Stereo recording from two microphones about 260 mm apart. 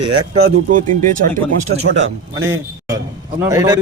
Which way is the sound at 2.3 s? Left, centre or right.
Centre.